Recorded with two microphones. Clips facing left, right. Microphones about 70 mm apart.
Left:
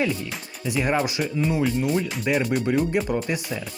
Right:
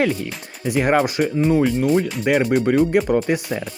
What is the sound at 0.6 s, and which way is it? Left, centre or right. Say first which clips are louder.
Speech: right 6 dB; right.